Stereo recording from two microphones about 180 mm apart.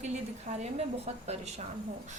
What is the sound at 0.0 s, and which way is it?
A woman's voice, 40° right (ahead or behind).